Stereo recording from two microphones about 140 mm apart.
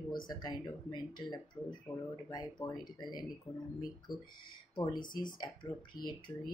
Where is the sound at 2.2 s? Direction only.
30° left (ahead or behind).